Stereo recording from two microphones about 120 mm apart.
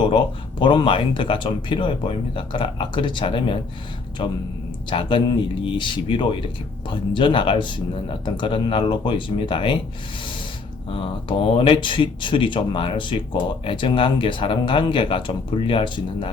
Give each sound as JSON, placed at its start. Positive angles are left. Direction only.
{"t": 0.6, "sound": "speech", "side_deg": 45}
{"t": 10.8, "sound": "speech", "side_deg": 50}